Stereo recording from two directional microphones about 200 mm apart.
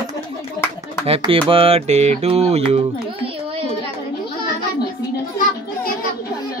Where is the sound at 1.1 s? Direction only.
25° right (ahead or behind).